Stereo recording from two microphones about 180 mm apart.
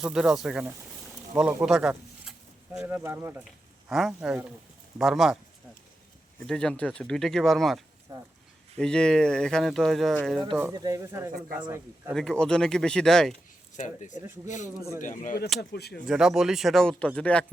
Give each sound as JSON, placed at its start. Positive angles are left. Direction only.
{"t": 0.0, "sound": "speech", "side_deg": -5}
{"t": 2.7, "sound": "speech", "side_deg": -15}
{"t": 3.8, "sound": "speech", "side_deg": 0}
{"t": 6.4, "sound": "speech", "side_deg": 5}
{"t": 8.8, "sound": "speech", "side_deg": 5}
{"t": 10.6, "sound": "speech", "side_deg": -20}
{"t": 12.1, "sound": "speech", "side_deg": 5}
{"t": 13.7, "sound": "speech", "side_deg": 40}
{"t": 14.8, "sound": "speech", "side_deg": -15}
{"t": 15.0, "sound": "speech", "side_deg": 45}
{"t": 15.7, "sound": "speech", "side_deg": 65}
{"t": 16.0, "sound": "speech", "side_deg": -5}